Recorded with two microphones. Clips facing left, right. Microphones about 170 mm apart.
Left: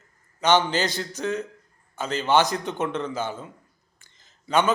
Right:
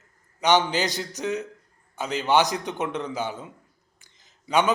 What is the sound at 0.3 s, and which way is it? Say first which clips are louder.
A man's voice: even; 15° right (ahead or behind).